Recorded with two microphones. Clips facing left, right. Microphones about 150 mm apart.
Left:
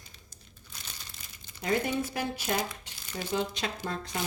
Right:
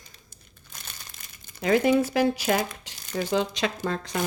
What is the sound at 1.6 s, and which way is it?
Speech, 90° right.